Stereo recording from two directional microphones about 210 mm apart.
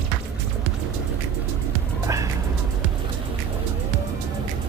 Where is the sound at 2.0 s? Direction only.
15° right (ahead or behind).